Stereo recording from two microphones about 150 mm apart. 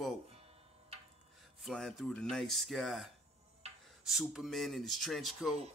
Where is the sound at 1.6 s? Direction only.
Centre (ahead or behind).